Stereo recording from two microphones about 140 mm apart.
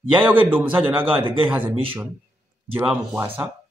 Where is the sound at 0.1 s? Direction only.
15° right (ahead or behind).